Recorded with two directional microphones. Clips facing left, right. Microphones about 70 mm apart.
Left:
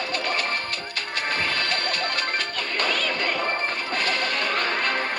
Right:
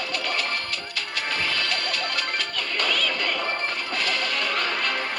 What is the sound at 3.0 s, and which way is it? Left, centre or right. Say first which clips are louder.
Music: left 1 dB; left.